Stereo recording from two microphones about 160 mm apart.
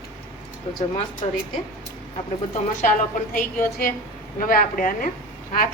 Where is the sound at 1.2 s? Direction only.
45° left (ahead or behind).